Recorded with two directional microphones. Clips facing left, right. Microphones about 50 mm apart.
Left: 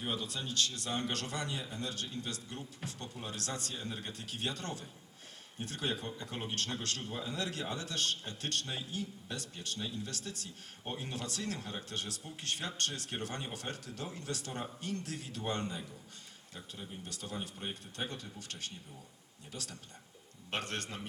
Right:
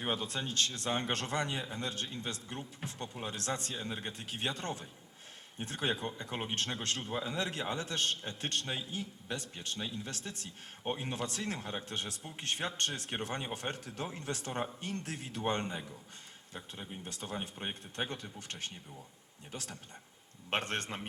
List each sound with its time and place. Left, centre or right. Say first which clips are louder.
0.0 s a man's voice: right 3 dB; right